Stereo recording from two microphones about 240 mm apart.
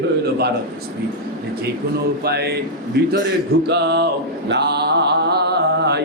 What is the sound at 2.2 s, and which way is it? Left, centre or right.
Speech, right.